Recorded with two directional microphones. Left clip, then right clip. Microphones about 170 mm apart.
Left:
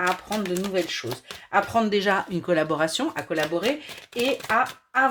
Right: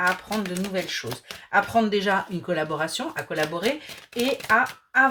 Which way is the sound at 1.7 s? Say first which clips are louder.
Even; 40° left (ahead or behind).